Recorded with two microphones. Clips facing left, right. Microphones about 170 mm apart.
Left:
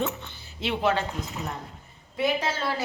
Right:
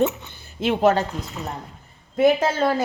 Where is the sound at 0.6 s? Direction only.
45° right (ahead or behind).